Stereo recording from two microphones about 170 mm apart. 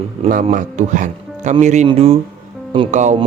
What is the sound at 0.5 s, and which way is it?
Speech, 45° right (ahead or behind).